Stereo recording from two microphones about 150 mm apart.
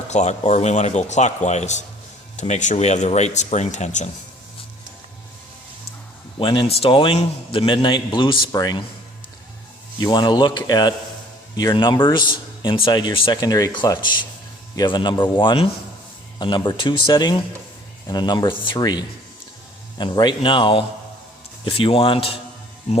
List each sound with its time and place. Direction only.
0.1 s speech: 50° left (ahead or behind)
6.4 s a man's voice: 35° left (ahead or behind)
10.0 s a man's voice: 30° left (ahead or behind)